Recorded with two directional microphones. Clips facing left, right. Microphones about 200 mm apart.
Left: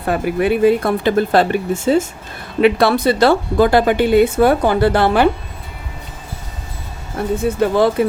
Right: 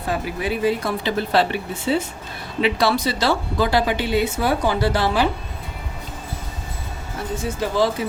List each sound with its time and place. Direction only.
0.0 s speech: 60° left (ahead or behind)
7.4 s speech: 55° left (ahead or behind)